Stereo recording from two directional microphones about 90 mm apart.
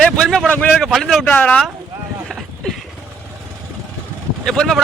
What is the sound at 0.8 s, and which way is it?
Speech, centre (ahead or behind).